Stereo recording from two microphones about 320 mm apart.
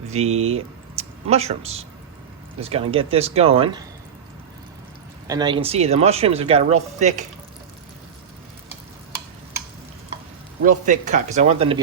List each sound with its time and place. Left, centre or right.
0.1 s speech: centre
5.3 s speech: centre
10.6 s speech: right